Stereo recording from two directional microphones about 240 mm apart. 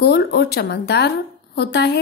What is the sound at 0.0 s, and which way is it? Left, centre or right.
A woman's voice, left.